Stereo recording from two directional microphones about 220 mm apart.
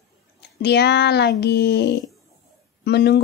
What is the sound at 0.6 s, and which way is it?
A woman's voice, 50° left (ahead or behind).